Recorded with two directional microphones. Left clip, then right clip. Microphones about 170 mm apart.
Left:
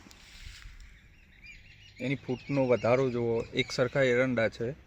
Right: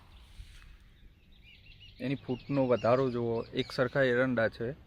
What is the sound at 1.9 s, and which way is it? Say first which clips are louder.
Speech: left 2 dB; 35° left (ahead or behind).